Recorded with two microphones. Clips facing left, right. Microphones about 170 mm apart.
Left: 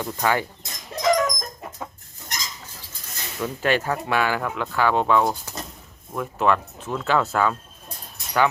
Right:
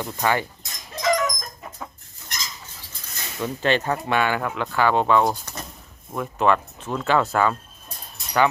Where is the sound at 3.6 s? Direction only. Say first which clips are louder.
Right 1 dB; 10° left (ahead or behind).